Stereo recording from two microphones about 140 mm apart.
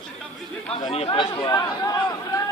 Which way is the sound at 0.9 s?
45° left (ahead or behind).